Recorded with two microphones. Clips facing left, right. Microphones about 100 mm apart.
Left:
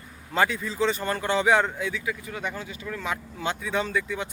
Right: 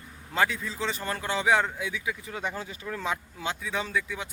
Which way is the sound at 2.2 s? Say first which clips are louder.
Left 1 dB; 30° right (ahead or behind).